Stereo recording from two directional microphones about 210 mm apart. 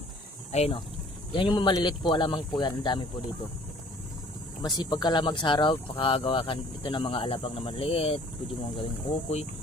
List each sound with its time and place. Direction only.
0.5 s speech: 30° left (ahead or behind)
4.6 s speech: 20° left (ahead or behind)